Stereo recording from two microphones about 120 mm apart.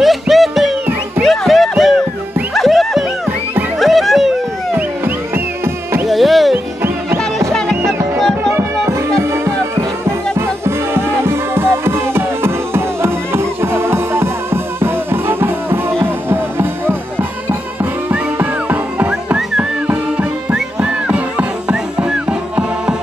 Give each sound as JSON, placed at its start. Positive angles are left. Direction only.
{"t": 0.0, "sound": "music", "side_deg": 0}
{"t": 4.7, "sound": "music", "side_deg": -15}
{"t": 6.0, "sound": "music", "side_deg": 0}
{"t": 6.5, "sound": "music", "side_deg": -20}
{"t": 9.2, "sound": "music", "side_deg": -20}